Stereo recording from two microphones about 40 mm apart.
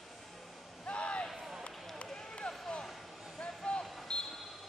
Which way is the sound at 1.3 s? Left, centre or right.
Centre.